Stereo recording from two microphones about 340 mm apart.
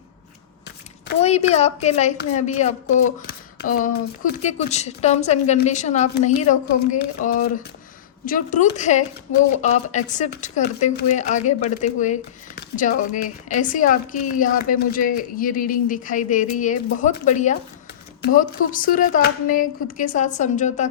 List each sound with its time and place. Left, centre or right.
1.0 s a woman's voice: centre